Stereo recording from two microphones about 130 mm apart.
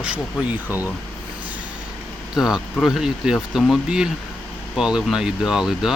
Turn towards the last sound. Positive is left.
turn(degrees=-5)  # may be behind; listen again after turning